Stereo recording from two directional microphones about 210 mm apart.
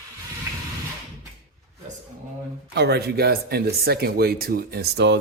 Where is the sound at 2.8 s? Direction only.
50° right (ahead or behind).